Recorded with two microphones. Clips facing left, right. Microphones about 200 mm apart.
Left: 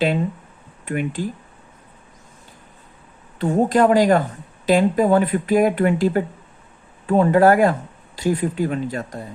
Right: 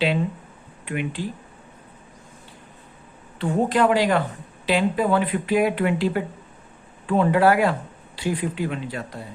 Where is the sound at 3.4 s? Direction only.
40° left (ahead or behind).